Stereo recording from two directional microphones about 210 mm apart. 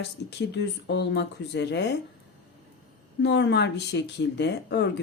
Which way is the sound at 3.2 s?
55° left (ahead or behind).